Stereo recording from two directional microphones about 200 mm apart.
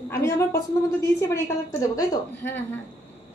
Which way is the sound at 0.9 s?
10° left (ahead or behind).